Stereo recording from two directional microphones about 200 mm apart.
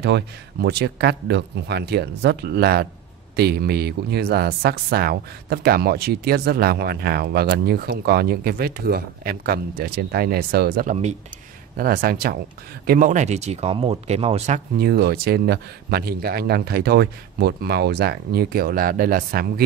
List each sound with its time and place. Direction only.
0.0 s speech: 55° right (ahead or behind); by 11.1 s 35° right (ahead or behind)
11.7 s speech: 45° right (ahead or behind)
14.8 s speech: 50° right (ahead or behind)